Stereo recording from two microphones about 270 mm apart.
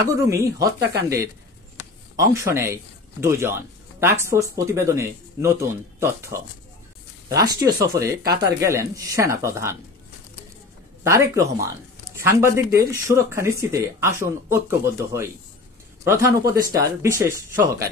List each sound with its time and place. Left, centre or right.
0.1 s speech: centre
8.2 s speech: right
8.5 s speech: centre
11.1 s speech: centre